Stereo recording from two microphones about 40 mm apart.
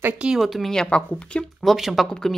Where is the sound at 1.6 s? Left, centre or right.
Centre.